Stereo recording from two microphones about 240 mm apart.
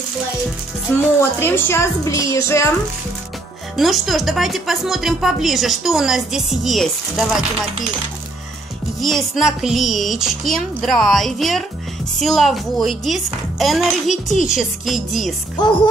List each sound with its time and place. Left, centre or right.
0.9 s a woman's voice: centre
3.7 s speech: centre
9.0 s speech: centre
15.6 s music: centre